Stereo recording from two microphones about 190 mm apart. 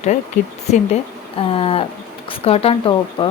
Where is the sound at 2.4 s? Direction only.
30° left (ahead or behind).